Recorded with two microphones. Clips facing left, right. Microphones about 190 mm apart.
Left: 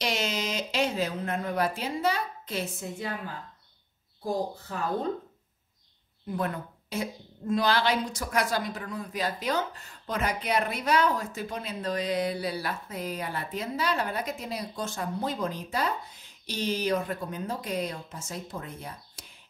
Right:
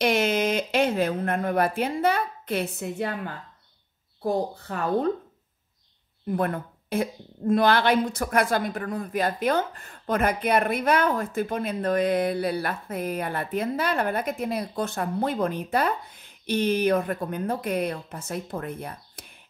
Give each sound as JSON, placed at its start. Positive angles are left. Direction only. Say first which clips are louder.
{"t": 0.0, "sound": "speech", "louder": "right 8 dB", "side_deg": -55}
{"t": 4.2, "sound": "a woman's voice", "louder": "right 4 dB", "side_deg": -65}
{"t": 6.3, "sound": "a woman's voice", "louder": "right 5 dB", "side_deg": -55}